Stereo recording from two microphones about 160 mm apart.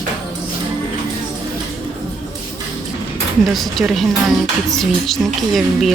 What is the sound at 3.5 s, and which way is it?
A woman's voice, centre (ahead or behind).